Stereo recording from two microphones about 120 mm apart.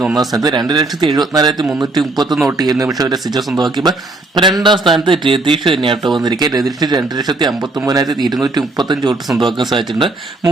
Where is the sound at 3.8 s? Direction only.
5° left (ahead or behind).